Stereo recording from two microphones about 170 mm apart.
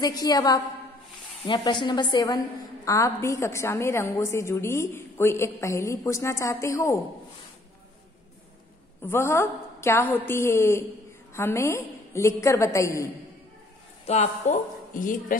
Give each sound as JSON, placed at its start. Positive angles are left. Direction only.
{"t": 0.0, "sound": "a woman's voice", "side_deg": 20}
{"t": 9.0, "sound": "a woman's voice", "side_deg": 15}
{"t": 14.0, "sound": "a man's voice", "side_deg": 40}